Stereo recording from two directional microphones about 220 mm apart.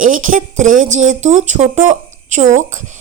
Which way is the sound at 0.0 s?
35° right (ahead or behind).